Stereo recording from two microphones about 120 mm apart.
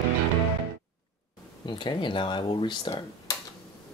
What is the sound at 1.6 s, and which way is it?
Speech, 45° left (ahead or behind).